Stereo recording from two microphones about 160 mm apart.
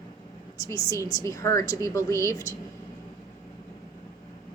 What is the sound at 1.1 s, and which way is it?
A woman's voice, 20° left (ahead or behind).